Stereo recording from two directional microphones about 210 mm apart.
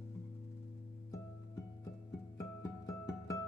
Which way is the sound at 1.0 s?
15° left (ahead or behind).